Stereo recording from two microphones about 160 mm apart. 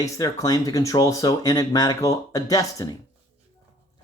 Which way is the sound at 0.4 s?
25° left (ahead or behind).